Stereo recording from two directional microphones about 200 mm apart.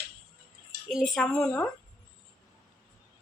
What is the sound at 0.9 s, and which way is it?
Speech, centre (ahead or behind).